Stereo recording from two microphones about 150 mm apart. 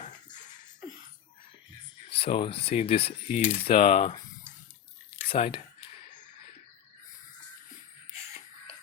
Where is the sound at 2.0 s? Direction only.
40° left (ahead or behind).